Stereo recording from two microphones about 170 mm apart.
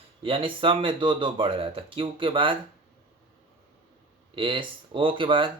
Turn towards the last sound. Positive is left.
turn(degrees=-30)  # may be behind; listen again after turning